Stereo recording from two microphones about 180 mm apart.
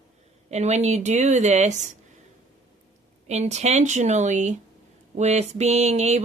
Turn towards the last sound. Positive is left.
turn(degrees=-40)  # may be behind; listen again after turning